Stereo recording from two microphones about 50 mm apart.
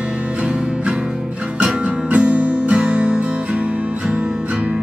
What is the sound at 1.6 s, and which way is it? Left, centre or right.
Music, right.